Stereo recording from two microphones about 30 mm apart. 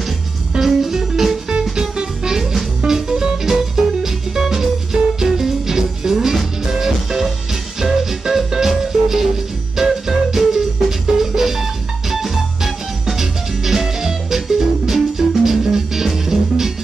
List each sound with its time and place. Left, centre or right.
0.6 s music: centre
1.6 s music: right